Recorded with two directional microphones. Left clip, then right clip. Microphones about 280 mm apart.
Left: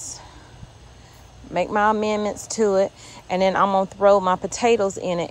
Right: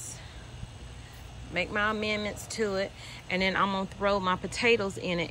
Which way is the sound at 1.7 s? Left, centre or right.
Centre.